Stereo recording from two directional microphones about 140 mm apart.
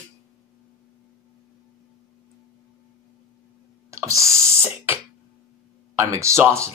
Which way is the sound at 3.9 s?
20° right (ahead or behind).